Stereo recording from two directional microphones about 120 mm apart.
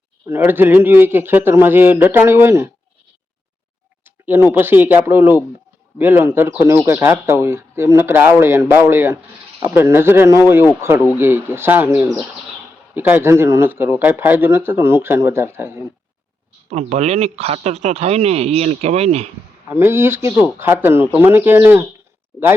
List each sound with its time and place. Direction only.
0.3 s a man's voice: 15° right (ahead or behind)
4.0 s a man's voice: 20° right (ahead or behind)
16.6 s speech: 65° right (ahead or behind)
19.6 s speech: 20° right (ahead or behind)